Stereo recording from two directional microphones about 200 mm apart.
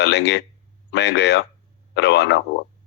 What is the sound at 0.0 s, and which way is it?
A man's voice, 60° left (ahead or behind).